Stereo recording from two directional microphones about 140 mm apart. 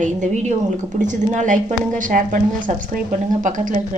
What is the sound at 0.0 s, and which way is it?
A woman's voice, 60° right (ahead or behind).